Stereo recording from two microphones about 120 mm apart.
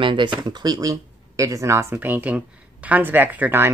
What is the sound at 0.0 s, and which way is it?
Speech, 40° right (ahead or behind).